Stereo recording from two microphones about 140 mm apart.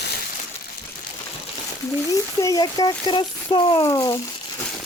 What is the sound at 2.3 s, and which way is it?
Speech, 25° left (ahead or behind).